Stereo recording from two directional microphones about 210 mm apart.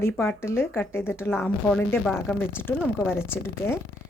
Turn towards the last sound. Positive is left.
turn(degrees=10)  # may be behind; listen again after turning